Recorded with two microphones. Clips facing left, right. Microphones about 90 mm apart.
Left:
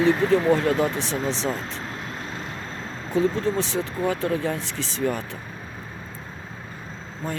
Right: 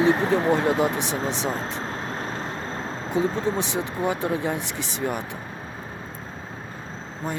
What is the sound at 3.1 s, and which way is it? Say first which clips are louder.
Speech: left 2 dB; 20° right (ahead or behind).